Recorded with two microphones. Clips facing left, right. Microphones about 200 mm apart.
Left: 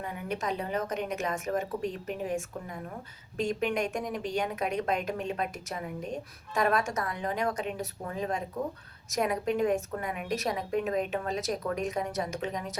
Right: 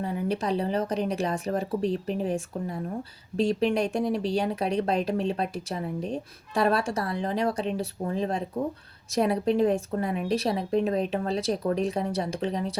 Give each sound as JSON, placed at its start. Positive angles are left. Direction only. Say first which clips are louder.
{"t": 0.0, "sound": "speech", "louder": "right 6 dB", "side_deg": -35}